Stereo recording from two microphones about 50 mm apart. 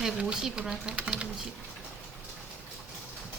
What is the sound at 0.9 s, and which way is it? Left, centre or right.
Speech, right.